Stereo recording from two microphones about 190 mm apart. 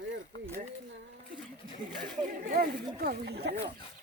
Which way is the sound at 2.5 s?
50° right (ahead or behind).